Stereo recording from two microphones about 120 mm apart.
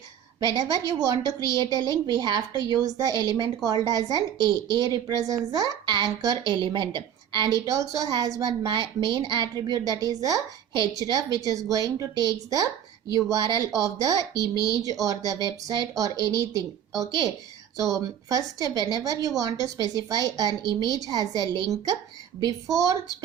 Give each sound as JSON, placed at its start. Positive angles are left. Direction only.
{"t": 0.3, "sound": "a woman's voice", "side_deg": -35}